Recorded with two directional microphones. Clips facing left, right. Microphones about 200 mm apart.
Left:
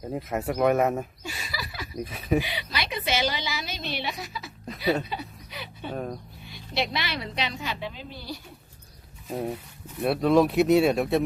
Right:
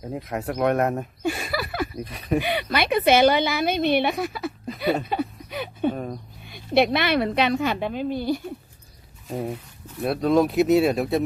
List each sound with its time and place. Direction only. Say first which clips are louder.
0.0 s speech: even; centre (ahead or behind)
1.2 s speech: right 11 dB; 55° right (ahead or behind)
2.0 s speech: left 2 dB; centre (ahead or behind)
2.4 s a woman's voice: right 9 dB; 55° right (ahead or behind)
5.9 s speech: right 2 dB; centre (ahead or behind)
6.4 s a woman's voice: right 11 dB; 55° right (ahead or behind)
9.3 s speech: right 1 dB; centre (ahead or behind)